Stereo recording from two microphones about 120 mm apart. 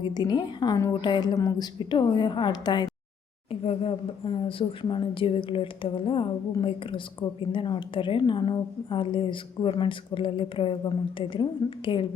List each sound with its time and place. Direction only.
0.0 s a woman's voice: 35° left (ahead or behind)
3.5 s a woman's voice: 50° left (ahead or behind)